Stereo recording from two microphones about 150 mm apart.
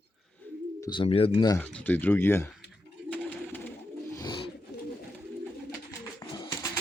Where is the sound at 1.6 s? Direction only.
10° left (ahead or behind).